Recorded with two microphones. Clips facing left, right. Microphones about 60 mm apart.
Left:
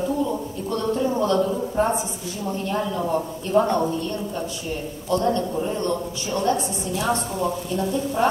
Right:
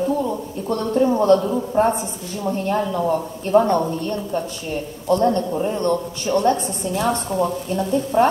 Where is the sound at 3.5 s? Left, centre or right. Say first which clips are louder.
Right 4 dB; right.